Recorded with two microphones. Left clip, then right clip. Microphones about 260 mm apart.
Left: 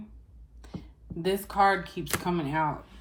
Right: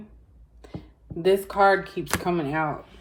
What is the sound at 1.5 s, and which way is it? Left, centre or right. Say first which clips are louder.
Speech: even; centre.